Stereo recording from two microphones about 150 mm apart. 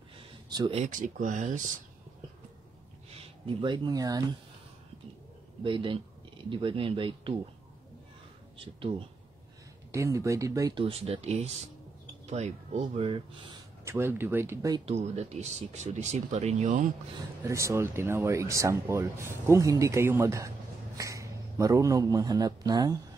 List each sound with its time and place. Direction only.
0.5 s speech: 25° right (ahead or behind)
0.7 s speech: 55° right (ahead or behind)
3.2 s speech: 35° right (ahead or behind)
5.6 s speech: 35° right (ahead or behind)
8.5 s speech: 35° right (ahead or behind)
9.8 s speech: 20° right (ahead or behind)
10.7 s speech: 40° right (ahead or behind)
12.8 s speech: 35° right (ahead or behind)
13.8 s speech: 15° right (ahead or behind)
14.9 s speech: 45° right (ahead or behind)
17.4 s a man's voice: 20° right (ahead or behind)